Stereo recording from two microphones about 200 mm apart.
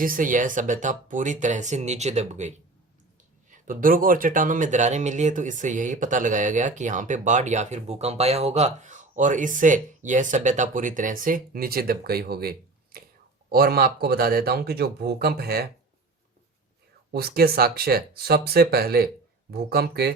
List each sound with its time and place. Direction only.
0.0 s speech: 45° right (ahead or behind)
3.5 s speech: 40° right (ahead or behind)
17.2 s speech: 50° right (ahead or behind)